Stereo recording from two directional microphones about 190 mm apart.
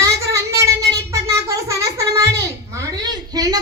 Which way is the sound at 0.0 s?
15° right (ahead or behind).